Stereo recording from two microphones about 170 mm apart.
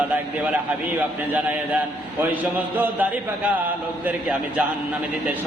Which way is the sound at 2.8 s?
10° right (ahead or behind).